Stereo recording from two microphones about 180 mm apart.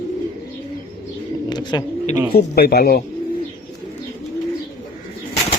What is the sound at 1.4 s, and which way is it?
Bird, 25° left (ahead or behind).